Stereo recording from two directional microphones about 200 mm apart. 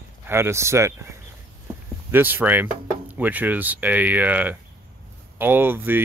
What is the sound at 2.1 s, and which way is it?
Speech, 10° right (ahead or behind).